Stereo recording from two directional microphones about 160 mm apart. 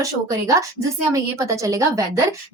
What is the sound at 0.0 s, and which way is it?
A woman's voice, 20° right (ahead or behind).